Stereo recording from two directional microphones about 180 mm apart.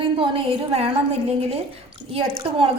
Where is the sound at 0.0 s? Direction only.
30° right (ahead or behind).